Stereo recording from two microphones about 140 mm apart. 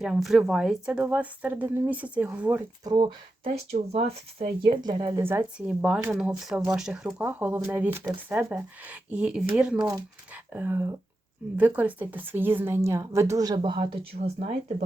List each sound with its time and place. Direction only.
0.0 s a woman's voice: centre (ahead or behind)
2.8 s speech: 30° right (ahead or behind)
3.7 s speech: 45° right (ahead or behind); by 5.2 s 30° right (ahead or behind)
5.2 s a woman's voice: 15° right (ahead or behind)
13.6 s speech: 40° right (ahead or behind)
14.3 s speech: 65° right (ahead or behind)